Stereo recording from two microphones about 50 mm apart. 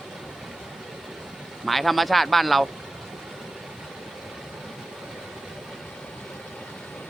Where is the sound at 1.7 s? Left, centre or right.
Centre.